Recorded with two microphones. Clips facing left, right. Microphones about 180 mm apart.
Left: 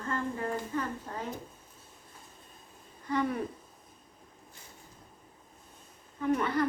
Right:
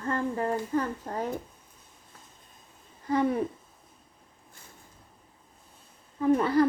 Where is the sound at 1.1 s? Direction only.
40° right (ahead or behind).